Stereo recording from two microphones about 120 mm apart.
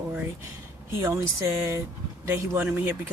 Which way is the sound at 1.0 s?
25° right (ahead or behind).